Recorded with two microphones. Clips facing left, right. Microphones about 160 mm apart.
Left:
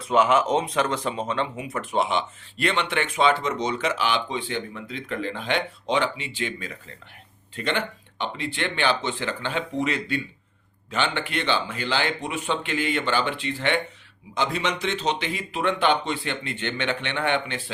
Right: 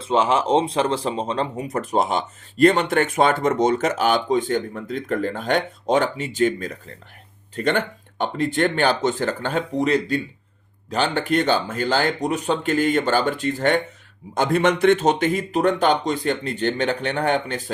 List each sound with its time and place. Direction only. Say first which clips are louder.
0.0 s speech: right 1 dB; 30° right (ahead or behind)